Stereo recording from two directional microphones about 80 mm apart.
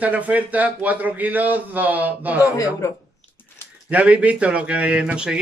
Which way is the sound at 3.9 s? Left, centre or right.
Centre.